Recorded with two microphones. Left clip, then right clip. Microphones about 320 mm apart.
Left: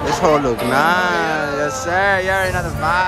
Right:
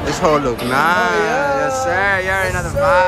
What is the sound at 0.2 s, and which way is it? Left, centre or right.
Speech, centre.